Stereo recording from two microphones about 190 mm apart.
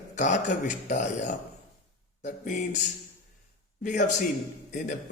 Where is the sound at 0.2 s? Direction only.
40° left (ahead or behind).